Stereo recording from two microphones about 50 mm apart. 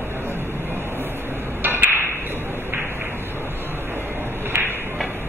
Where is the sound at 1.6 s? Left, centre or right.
Right.